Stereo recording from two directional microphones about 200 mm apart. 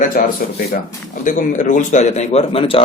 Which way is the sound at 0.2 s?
40° left (ahead or behind).